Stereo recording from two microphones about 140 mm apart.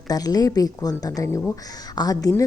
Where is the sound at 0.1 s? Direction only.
25° left (ahead or behind).